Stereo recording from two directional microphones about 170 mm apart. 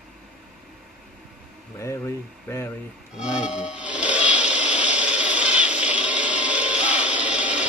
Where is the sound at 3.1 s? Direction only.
5° right (ahead or behind).